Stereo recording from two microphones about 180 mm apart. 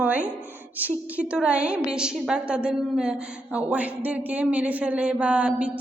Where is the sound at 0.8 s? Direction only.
10° right (ahead or behind).